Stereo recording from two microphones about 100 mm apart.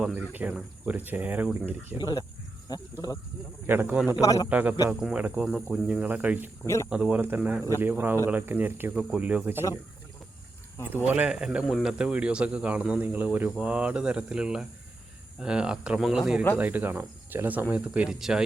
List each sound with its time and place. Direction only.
0.0 s speech: 10° right (ahead or behind)
2.0 s speech: 45° left (ahead or behind)
3.7 s speech: 20° right (ahead or behind)
4.2 s a man's voice: 35° left (ahead or behind)
4.4 s speech: 15° right (ahead or behind)
10.8 s speech: 15° right (ahead or behind)
16.6 s speech: 15° right (ahead or behind)